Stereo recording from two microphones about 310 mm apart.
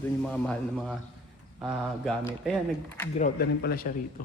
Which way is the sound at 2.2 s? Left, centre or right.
Centre.